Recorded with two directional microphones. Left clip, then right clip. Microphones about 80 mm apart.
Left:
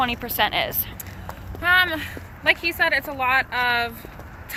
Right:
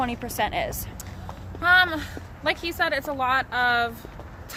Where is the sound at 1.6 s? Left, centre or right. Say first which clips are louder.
Even; right.